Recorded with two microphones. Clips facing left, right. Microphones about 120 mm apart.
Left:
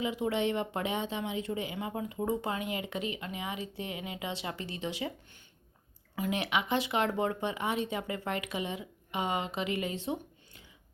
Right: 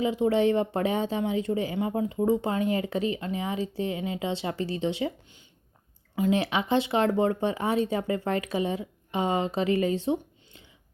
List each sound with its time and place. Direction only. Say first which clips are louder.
0.0 s speech: right 7 dB; 30° right (ahead or behind)
6.1 s speech: right 6 dB; 30° right (ahead or behind)